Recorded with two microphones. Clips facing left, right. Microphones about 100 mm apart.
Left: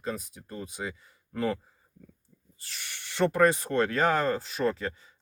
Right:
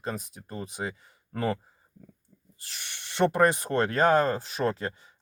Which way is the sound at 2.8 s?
25° right (ahead or behind).